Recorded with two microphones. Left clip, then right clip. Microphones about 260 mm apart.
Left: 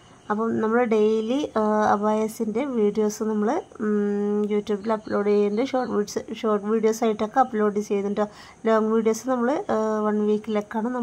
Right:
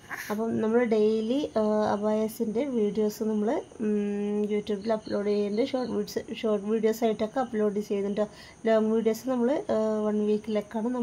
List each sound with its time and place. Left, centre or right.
0.3 s speech: centre